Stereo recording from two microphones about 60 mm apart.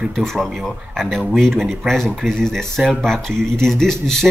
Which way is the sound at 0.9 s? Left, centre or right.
Centre.